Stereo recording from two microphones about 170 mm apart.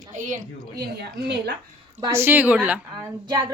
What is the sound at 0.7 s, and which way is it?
Speech, 75° right (ahead or behind).